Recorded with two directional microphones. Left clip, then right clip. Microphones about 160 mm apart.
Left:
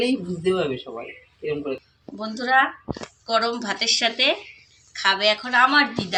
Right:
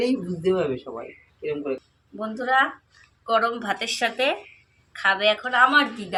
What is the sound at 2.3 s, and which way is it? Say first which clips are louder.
A woman's voice: left 2 dB; 20° right (ahead or behind).